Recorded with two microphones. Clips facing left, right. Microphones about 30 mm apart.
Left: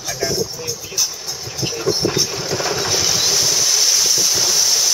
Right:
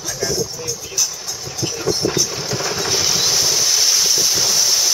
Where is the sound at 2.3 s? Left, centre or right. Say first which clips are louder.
Left 2 dB; centre.